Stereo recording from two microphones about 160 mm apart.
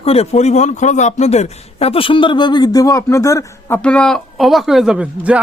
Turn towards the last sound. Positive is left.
turn(degrees=-5)  # may be behind; listen again after turning